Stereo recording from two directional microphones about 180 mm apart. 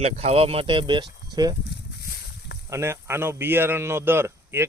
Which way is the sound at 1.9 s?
65° left (ahead or behind).